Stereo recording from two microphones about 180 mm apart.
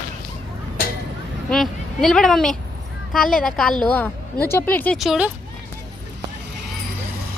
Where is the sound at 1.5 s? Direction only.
Centre (ahead or behind).